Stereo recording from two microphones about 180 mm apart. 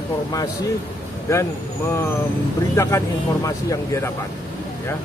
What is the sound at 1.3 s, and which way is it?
Speech, 15° left (ahead or behind).